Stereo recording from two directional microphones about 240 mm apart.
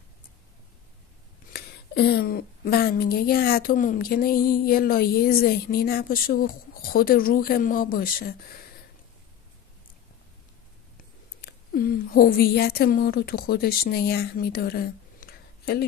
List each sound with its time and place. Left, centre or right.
1.5 s a woman's voice: left
11.4 s a woman's voice: left